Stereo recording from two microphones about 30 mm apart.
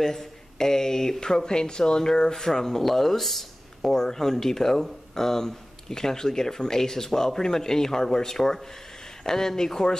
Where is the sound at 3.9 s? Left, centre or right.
Centre.